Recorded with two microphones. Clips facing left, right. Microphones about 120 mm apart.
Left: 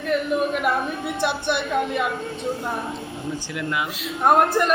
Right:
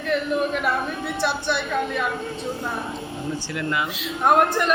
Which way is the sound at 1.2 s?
15° left (ahead or behind).